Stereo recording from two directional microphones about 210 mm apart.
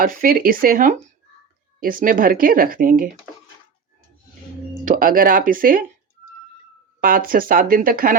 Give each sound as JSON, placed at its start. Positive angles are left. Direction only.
{"t": 0.0, "sound": "speech", "side_deg": -45}
{"t": 4.9, "sound": "speech", "side_deg": -40}
{"t": 7.0, "sound": "speech", "side_deg": -45}